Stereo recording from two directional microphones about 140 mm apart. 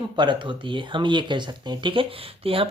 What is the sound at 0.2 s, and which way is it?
Speech, 35° right (ahead or behind).